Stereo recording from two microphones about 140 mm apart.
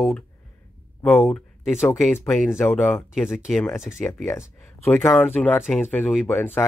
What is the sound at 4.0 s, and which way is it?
Speech, 5° left (ahead or behind).